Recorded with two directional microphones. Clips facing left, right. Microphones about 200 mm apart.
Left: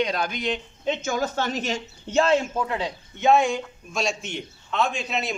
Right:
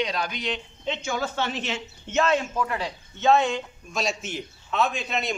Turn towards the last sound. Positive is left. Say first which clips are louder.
# even
turn(degrees=0)  # may be behind; listen again after turning